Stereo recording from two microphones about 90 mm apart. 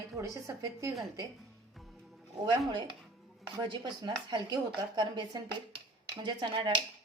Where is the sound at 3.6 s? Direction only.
65° right (ahead or behind).